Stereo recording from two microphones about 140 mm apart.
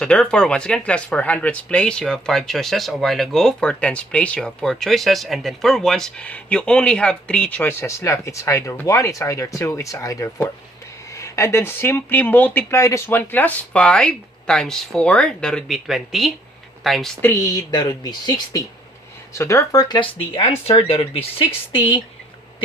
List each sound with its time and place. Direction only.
0.0 s speech: 5° left (ahead or behind)
17.5 s speech: 25° left (ahead or behind)